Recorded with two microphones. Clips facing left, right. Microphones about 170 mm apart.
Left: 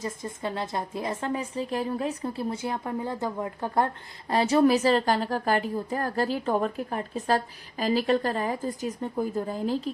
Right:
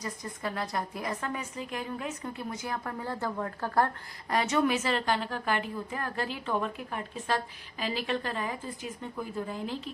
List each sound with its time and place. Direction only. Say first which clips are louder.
0.0 s a woman's voice: left 4 dB; 25° left (ahead or behind)
4.3 s a woman's voice: left 6 dB; 30° left (ahead or behind)